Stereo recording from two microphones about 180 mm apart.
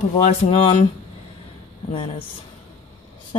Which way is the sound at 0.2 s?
40° left (ahead or behind).